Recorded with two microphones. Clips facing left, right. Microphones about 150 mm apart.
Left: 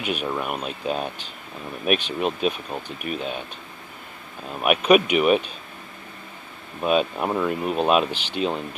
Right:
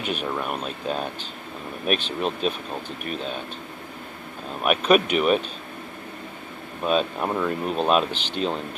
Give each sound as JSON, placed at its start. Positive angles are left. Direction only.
{"t": 0.0, "sound": "speech", "side_deg": 10}
{"t": 3.1, "sound": "speech", "side_deg": -45}
{"t": 4.6, "sound": "speech", "side_deg": 10}
{"t": 6.8, "sound": "speech", "side_deg": 5}